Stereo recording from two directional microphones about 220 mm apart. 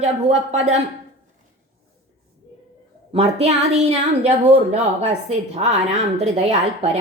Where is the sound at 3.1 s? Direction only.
30° right (ahead or behind).